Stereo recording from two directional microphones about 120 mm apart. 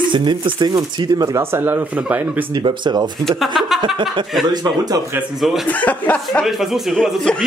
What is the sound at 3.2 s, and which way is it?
Speech, centre (ahead or behind).